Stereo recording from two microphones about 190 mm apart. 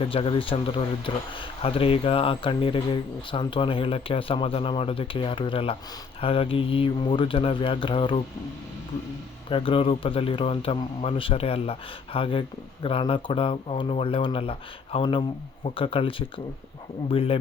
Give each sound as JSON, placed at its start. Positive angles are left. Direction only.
{"t": 0.0, "sound": "speech", "side_deg": 30}
{"t": 9.5, "sound": "speech", "side_deg": 30}